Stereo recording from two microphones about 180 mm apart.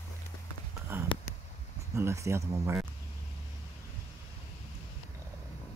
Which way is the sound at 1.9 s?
15° right (ahead or behind).